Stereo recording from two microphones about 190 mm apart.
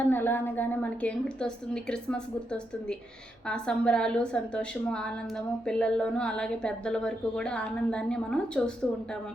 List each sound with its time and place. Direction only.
0.0 s a woman's voice: 10° left (ahead or behind)